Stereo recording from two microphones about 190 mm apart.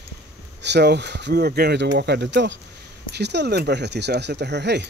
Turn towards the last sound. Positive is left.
turn(degrees=-65)  # may be behind; listen again after turning